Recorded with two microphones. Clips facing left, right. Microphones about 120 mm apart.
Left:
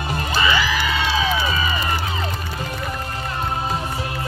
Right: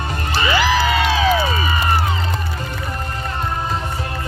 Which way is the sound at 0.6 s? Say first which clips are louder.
Right 5 dB; 90° right.